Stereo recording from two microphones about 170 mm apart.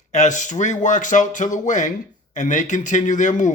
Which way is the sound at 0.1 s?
45° left (ahead or behind).